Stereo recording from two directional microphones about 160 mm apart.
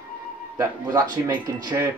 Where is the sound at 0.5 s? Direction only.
20° right (ahead or behind).